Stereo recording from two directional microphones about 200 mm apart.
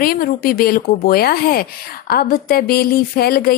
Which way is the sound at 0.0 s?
45° left (ahead or behind).